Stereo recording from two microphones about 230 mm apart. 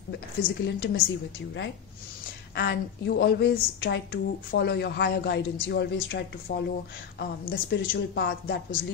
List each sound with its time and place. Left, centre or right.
0.4 s a woman's voice: left
2.5 s a woman's voice: left